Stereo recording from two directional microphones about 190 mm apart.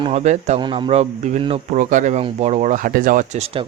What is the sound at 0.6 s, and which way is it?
A man's voice, 25° right (ahead or behind).